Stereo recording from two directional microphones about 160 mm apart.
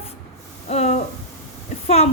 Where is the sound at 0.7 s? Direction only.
45° left (ahead or behind).